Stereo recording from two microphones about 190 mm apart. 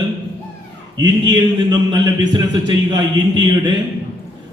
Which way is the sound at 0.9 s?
20° right (ahead or behind).